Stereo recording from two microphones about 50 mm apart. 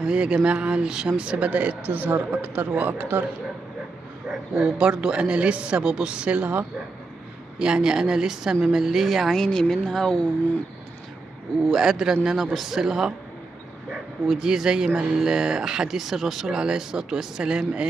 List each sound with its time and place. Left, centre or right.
0.0 s speech: right
4.6 s speech: centre
7.5 s speech: centre
9.4 s speech: centre
11.7 s speech: centre
14.2 s speech: centre